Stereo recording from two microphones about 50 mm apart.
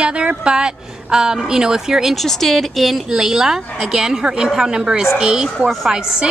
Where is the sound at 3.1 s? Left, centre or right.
Centre.